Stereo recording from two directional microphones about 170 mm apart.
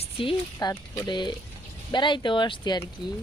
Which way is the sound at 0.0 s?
30° left (ahead or behind).